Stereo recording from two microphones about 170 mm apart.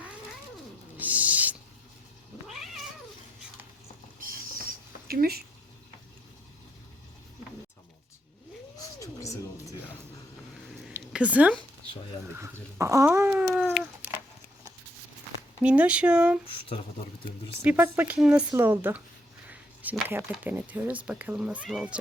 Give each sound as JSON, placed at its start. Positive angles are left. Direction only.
{"t": 0.9, "sound": "owl", "side_deg": -10}
{"t": 5.0, "sound": "speech", "side_deg": -65}
{"t": 9.0, "sound": "music", "side_deg": 20}
{"t": 10.9, "sound": "a sound", "side_deg": -10}
{"t": 12.8, "sound": "speech", "side_deg": -20}
{"t": 15.6, "sound": "speech", "side_deg": -5}
{"t": 16.5, "sound": "speech", "side_deg": 35}
{"t": 17.6, "sound": "speech", "side_deg": -10}
{"t": 19.5, "sound": "a sound", "side_deg": -10}
{"t": 20.3, "sound": "speech", "side_deg": -10}